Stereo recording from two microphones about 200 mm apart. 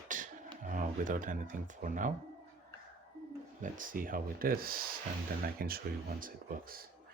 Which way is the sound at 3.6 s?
45° right (ahead or behind).